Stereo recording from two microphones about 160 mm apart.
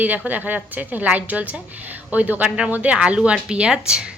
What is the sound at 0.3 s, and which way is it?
A woman's voice, 10° right (ahead or behind).